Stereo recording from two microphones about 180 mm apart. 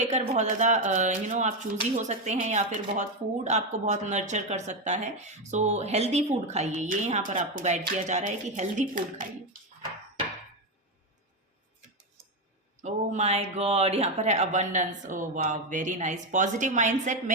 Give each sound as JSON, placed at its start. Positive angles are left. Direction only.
{"t": 0.0, "sound": "speech", "side_deg": -40}
{"t": 12.8, "sound": "speech", "side_deg": -40}